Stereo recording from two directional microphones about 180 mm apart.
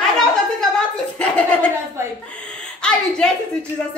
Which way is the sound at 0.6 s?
5° left (ahead or behind).